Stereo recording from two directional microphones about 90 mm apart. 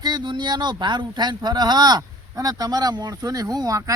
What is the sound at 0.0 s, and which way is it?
Speech, 55° right (ahead or behind).